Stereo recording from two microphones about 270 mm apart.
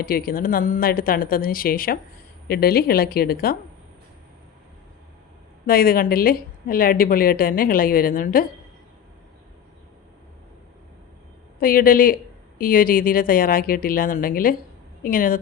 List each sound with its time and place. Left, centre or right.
0.0 s a woman's voice: left
5.6 s a woman's voice: left
11.6 s a woman's voice: left